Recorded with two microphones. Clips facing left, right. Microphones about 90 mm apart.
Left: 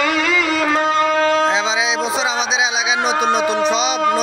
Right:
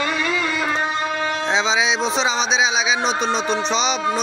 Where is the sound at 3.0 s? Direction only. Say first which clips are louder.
Left 4 dB; 60° left (ahead or behind).